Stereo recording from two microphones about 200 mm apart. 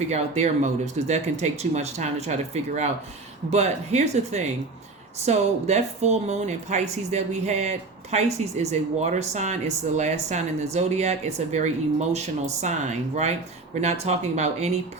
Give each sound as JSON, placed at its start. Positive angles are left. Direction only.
{"t": 0.1, "sound": "speech", "side_deg": -35}